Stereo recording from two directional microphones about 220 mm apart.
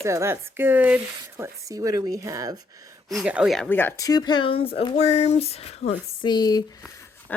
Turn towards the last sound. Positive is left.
turn(degrees=5)  # may be behind; listen again after turning